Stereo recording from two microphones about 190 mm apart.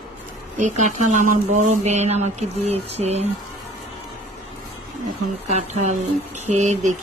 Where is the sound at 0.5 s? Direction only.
40° right (ahead or behind).